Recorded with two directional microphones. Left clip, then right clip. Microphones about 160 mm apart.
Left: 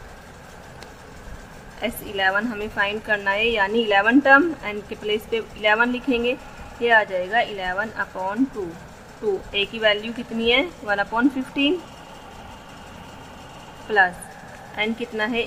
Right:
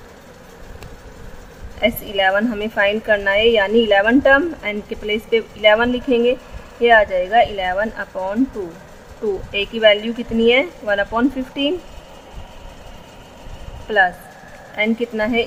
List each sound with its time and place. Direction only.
1.8 s a woman's voice: 20° right (ahead or behind)
9.5 s a woman's voice: 15° right (ahead or behind)
13.8 s a woman's voice: 15° right (ahead or behind)